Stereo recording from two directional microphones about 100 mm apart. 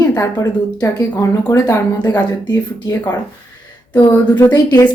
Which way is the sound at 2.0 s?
45° left (ahead or behind).